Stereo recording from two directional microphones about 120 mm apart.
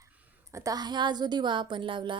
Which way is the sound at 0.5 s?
30° right (ahead or behind).